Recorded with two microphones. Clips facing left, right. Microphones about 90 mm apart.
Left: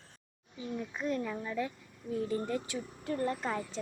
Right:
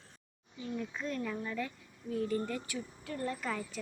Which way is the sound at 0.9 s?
15° left (ahead or behind).